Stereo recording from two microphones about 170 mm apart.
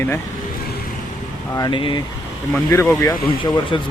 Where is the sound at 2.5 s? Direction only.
15° left (ahead or behind).